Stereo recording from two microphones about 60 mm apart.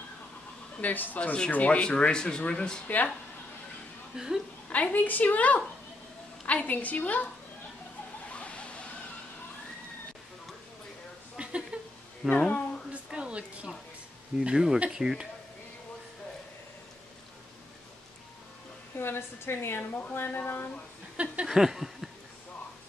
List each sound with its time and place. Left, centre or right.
0.7 s a woman's voice: left
4.6 s a woman's voice: left
8.3 s waterfall: left
11.3 s a sound: centre
12.3 s speech: centre
12.9 s a sound: centre
14.4 s speech: centre
18.9 s a woman's voice: left
19.9 s a woman's voice: left
21.2 s a sound: centre